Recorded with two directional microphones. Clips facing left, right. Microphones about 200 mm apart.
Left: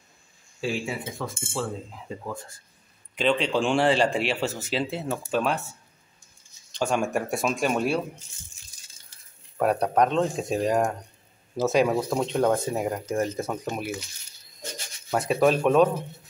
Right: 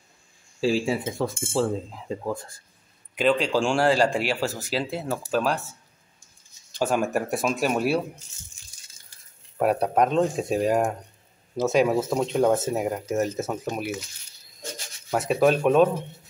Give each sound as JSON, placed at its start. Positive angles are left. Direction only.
{"t": 0.6, "sound": "speech", "side_deg": -35}
{"t": 3.2, "sound": "speech", "side_deg": 0}
{"t": 9.6, "sound": "speech", "side_deg": -5}
{"t": 15.0, "sound": "speech", "side_deg": 0}